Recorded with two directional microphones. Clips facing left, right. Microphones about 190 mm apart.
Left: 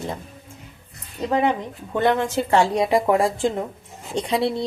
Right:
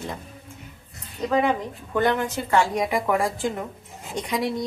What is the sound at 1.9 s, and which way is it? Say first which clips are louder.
Speech: left 3 dB; 30° left (ahead or behind).